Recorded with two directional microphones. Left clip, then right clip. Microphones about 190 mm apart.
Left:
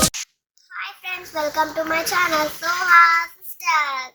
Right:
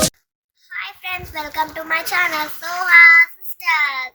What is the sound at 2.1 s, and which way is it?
Child singing, 25° right (ahead or behind).